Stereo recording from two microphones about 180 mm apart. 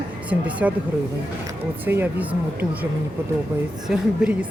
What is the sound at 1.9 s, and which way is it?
Speech, 10° right (ahead or behind).